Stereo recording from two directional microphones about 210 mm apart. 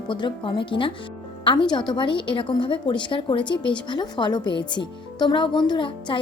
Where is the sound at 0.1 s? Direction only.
25° left (ahead or behind).